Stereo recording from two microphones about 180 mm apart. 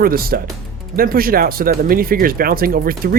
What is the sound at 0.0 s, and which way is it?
Speech, 55° right (ahead or behind).